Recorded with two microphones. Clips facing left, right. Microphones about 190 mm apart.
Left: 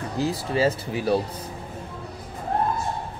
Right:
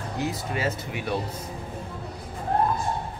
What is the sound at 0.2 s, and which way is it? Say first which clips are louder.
Speech: left 6 dB; 30° left (ahead or behind).